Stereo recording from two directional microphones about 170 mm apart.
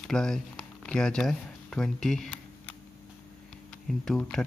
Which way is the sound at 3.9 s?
5° left (ahead or behind).